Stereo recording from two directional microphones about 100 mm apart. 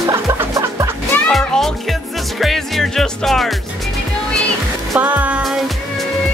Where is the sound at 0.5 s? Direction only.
35° right (ahead or behind).